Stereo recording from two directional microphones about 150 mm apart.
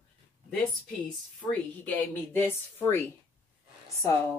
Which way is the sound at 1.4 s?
10° left (ahead or behind).